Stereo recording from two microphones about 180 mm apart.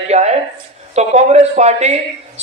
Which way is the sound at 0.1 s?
40° right (ahead or behind).